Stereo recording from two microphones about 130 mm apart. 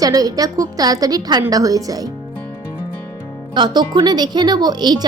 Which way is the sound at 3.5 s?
35° right (ahead or behind).